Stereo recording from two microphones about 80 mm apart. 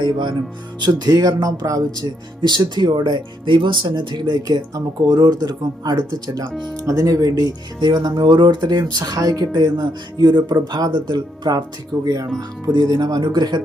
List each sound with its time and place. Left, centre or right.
0.0 s speech: right
0.8 s speech: right
2.4 s speech: right
6.7 s speech: right
12.0 s speech: right